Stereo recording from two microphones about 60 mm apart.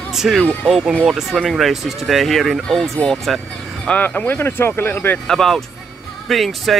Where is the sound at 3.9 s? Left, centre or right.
Left.